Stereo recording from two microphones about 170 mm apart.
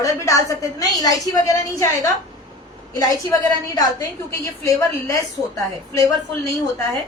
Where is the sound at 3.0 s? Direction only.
20° left (ahead or behind).